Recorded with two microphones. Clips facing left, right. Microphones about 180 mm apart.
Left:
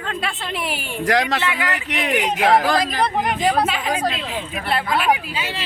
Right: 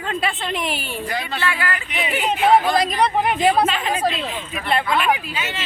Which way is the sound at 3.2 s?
5° right (ahead or behind).